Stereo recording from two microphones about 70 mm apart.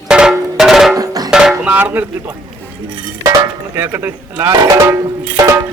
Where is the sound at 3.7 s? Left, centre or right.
Right.